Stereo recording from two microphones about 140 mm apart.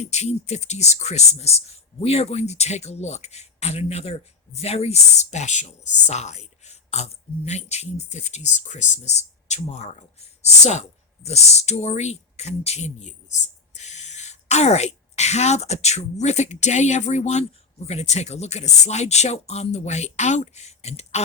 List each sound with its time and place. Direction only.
0.0 s speech: 55° left (ahead or behind)